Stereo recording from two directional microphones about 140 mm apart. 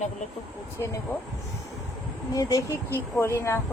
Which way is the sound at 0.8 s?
25° left (ahead or behind).